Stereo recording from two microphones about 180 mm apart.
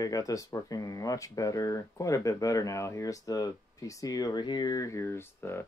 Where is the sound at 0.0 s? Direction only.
20° left (ahead or behind).